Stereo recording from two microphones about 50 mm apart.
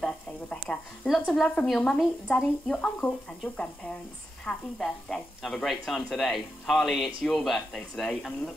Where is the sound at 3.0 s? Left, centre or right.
Centre.